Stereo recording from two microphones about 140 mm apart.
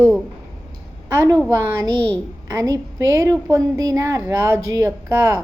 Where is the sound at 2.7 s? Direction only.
25° right (ahead or behind).